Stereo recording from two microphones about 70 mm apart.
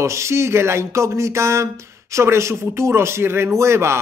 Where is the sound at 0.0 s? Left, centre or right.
Right.